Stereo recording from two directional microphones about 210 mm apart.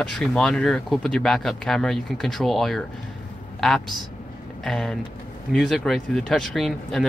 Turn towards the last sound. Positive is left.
turn(degrees=0)  # may be behind; listen again after turning